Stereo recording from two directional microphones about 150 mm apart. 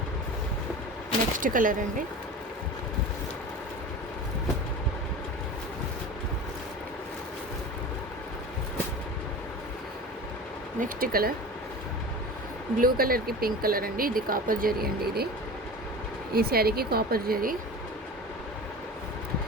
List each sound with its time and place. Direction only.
1.4 s speech: 65° right (ahead or behind)
10.8 s speech: 70° right (ahead or behind)
12.8 s speech: 80° right
16.3 s speech: 90° right